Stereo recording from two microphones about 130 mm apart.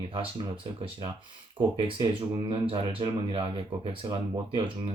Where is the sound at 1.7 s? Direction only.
40° right (ahead or behind).